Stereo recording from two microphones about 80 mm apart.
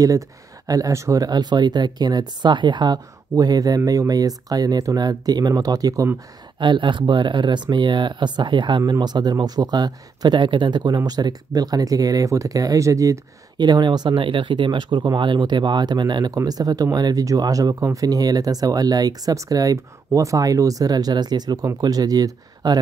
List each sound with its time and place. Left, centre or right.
0.7 s speech: right
6.6 s speech: right
9.0 s speech: right
13.6 s speech: right
16.4 s speech: right